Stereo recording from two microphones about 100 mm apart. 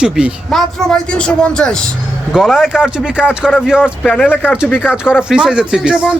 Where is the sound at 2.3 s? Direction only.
5° right (ahead or behind).